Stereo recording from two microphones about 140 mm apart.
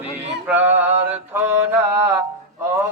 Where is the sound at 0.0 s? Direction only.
15° right (ahead or behind).